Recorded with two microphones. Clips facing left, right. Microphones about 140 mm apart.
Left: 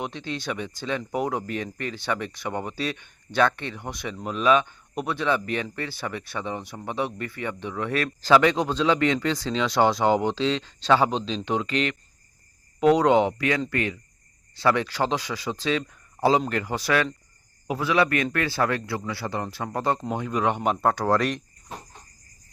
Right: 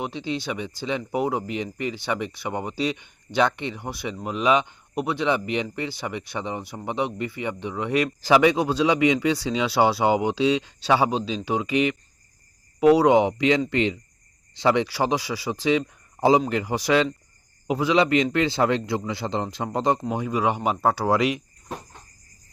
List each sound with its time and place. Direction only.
0.0 s a man's voice: 10° right (ahead or behind)